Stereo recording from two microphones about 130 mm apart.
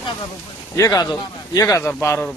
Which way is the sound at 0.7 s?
25° left (ahead or behind).